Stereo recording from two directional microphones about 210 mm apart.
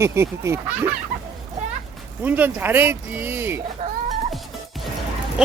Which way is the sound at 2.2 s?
10° right (ahead or behind).